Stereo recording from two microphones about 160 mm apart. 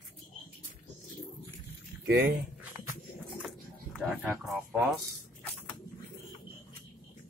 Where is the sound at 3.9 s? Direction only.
5° right (ahead or behind).